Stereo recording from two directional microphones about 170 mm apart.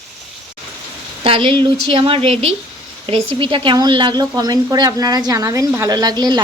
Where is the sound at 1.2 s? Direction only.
30° right (ahead or behind).